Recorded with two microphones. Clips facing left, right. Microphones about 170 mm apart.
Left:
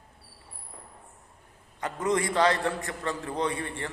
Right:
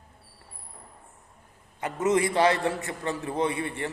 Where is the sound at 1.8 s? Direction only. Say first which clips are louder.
Right 3 dB; 20° right (ahead or behind).